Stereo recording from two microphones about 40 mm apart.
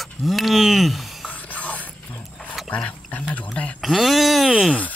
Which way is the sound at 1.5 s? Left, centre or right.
Left.